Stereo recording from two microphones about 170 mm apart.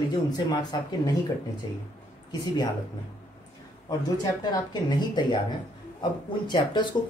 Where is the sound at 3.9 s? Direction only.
25° left (ahead or behind).